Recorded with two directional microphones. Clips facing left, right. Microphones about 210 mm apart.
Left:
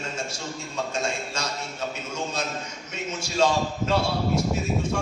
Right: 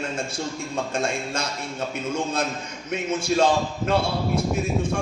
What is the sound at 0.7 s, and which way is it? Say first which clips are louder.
Speech: right 2 dB; 55° right (ahead or behind).